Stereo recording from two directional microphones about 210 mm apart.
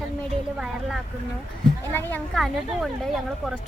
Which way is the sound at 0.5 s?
5° right (ahead or behind).